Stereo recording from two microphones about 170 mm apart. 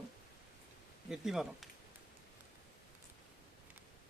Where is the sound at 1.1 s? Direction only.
Centre (ahead or behind).